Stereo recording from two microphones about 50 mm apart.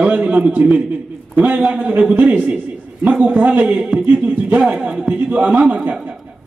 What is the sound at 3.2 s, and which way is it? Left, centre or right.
A man's voice, right.